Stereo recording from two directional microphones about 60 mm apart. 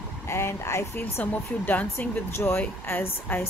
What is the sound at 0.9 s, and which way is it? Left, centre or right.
Speech, left.